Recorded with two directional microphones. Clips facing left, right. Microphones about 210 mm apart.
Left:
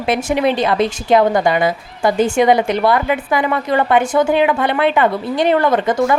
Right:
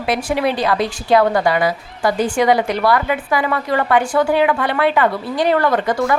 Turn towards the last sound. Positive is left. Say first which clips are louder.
# left 2 dB
turn(degrees=20)  # may be behind; listen again after turning